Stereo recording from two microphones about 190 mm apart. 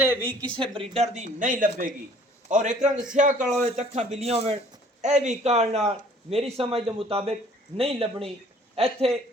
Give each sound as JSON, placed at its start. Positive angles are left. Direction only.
{"t": 0.0, "sound": "a sound", "side_deg": -10}
{"t": 0.6, "sound": "speech", "side_deg": -30}
{"t": 1.1, "sound": "a man's voice", "side_deg": -40}